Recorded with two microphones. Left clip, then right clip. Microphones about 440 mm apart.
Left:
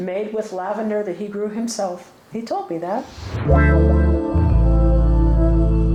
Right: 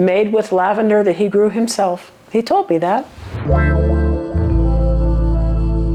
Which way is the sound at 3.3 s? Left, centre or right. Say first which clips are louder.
Even; centre.